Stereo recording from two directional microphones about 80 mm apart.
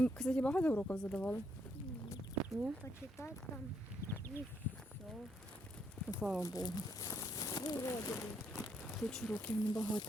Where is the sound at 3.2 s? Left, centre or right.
Left.